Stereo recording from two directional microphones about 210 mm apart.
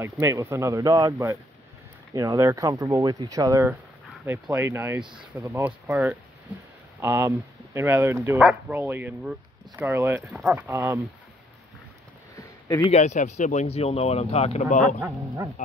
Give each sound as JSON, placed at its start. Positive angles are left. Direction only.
{"t": 0.0, "sound": "speech", "side_deg": -15}
{"t": 12.9, "sound": "speech", "side_deg": 35}
{"t": 15.0, "sound": "speech", "side_deg": -20}